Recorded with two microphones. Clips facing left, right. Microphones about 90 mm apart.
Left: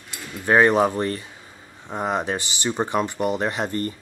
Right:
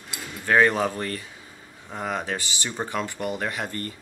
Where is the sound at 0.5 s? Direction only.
25° left (ahead or behind).